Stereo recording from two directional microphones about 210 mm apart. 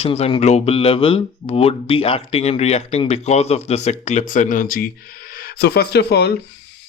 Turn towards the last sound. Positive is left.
turn(degrees=50)  # may be behind; listen again after turning